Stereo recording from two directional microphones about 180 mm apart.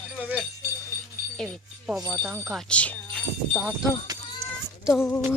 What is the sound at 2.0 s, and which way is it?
Speech, 20° right (ahead or behind).